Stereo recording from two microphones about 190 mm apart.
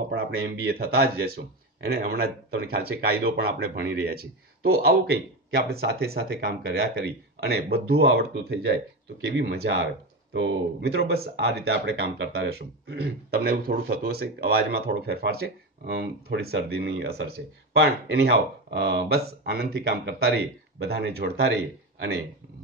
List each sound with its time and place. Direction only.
0.1 s speech: 55° right (ahead or behind)
10.3 s speech: 70° right (ahead or behind)